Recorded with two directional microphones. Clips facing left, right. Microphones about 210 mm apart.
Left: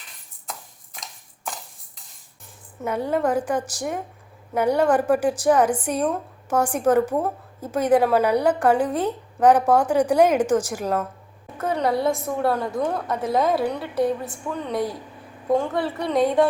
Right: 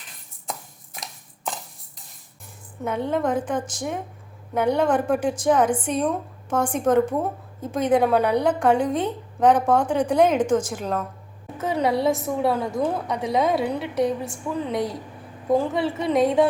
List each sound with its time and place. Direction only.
2.8 s a woman's voice: 10° left (ahead or behind)